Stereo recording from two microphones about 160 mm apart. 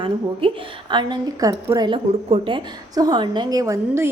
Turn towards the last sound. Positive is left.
turn(degrees=-15)  # may be behind; listen again after turning